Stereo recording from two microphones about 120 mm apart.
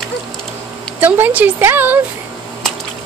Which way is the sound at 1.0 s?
15° right (ahead or behind).